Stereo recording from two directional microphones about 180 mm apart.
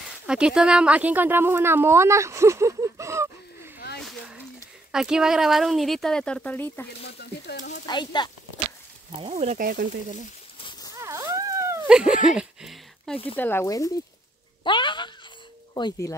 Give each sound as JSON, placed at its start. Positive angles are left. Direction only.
{"t": 0.3, "sound": "a woman's voice", "side_deg": -5}
{"t": 4.0, "sound": "a sound", "side_deg": 0}
{"t": 4.9, "sound": "speech", "side_deg": -5}
{"t": 7.0, "sound": "speech", "side_deg": 65}
{"t": 7.8, "sound": "speech", "side_deg": 25}
{"t": 9.2, "sound": "speech", "side_deg": -35}
{"t": 9.6, "sound": "speech", "side_deg": -50}
{"t": 10.6, "sound": "a sound", "side_deg": 25}
{"t": 11.0, "sound": "dog", "side_deg": -15}
{"t": 11.9, "sound": "speech", "side_deg": -5}
{"t": 14.6, "sound": "a sound", "side_deg": 25}
{"t": 15.7, "sound": "speech", "side_deg": 20}